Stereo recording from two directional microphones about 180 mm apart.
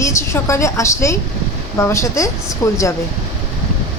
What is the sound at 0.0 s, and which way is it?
Speech, 15° left (ahead or behind).